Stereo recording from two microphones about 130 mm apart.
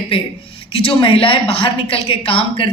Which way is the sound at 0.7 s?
40° left (ahead or behind).